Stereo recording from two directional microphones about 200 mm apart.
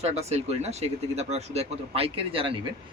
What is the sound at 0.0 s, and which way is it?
A man's voice, 35° right (ahead or behind).